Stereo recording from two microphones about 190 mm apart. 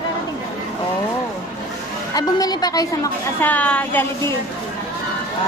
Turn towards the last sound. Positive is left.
turn(degrees=10)  # may be behind; listen again after turning